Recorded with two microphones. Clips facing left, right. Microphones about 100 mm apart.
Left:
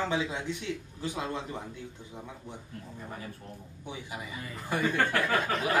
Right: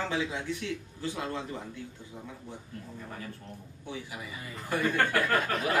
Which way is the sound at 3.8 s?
20° left (ahead or behind).